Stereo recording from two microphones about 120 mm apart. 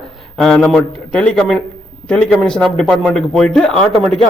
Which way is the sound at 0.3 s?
5° left (ahead or behind).